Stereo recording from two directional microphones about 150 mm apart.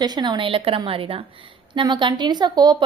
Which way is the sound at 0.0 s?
30° right (ahead or behind).